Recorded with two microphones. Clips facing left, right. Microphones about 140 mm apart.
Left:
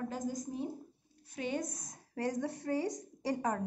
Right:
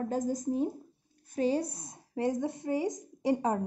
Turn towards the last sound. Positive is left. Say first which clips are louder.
# right 6 dB
turn(degrees=-25)  # may be behind; listen again after turning